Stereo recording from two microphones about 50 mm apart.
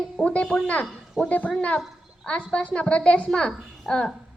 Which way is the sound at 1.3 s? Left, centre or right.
Left.